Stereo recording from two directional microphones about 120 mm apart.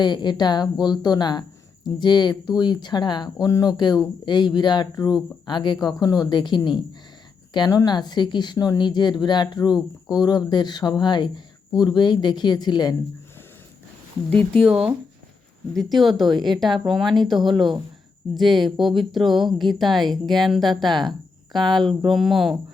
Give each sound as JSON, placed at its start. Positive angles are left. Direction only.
{"t": 0.0, "sound": "a woman's voice", "side_deg": 35}
{"t": 14.3, "sound": "speech", "side_deg": 10}
{"t": 14.7, "sound": "a woman's voice", "side_deg": -5}